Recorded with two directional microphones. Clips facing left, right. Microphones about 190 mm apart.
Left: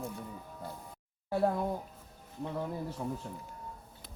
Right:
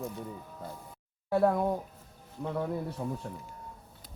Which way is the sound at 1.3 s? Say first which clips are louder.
Right 4 dB; 70° right (ahead or behind).